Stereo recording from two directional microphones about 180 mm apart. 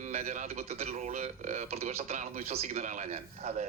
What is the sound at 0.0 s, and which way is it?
A man's voice, 40° right (ahead or behind).